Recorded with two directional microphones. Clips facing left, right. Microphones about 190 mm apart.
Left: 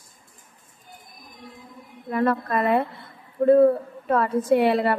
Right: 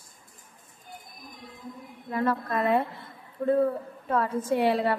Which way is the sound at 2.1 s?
65° left (ahead or behind).